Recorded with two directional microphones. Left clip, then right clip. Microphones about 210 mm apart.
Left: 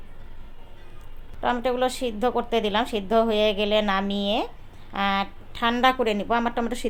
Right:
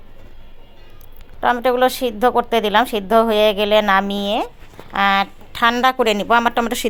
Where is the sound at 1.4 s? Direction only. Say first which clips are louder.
Right 8 dB; 20° right (ahead or behind).